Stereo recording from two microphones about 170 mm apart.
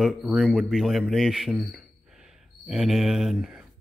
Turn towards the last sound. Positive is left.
turn(degrees=-5)  # may be behind; listen again after turning